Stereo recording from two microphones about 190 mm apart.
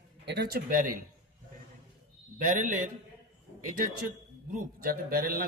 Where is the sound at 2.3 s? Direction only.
45° right (ahead or behind).